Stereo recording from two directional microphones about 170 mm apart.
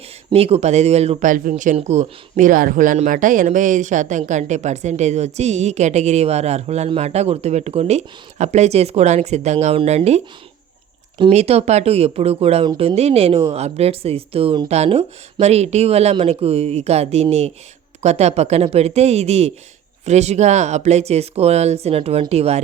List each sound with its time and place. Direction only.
0.3 s speech: 35° right (ahead or behind)